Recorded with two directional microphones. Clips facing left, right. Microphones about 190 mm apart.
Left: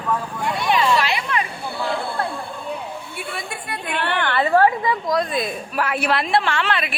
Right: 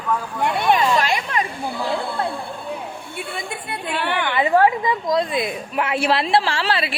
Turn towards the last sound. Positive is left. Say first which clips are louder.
# right 1 dB
turn(degrees=-30)  # may be behind; listen again after turning